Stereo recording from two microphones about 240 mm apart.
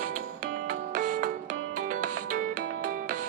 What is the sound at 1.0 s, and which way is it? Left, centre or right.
Music, right.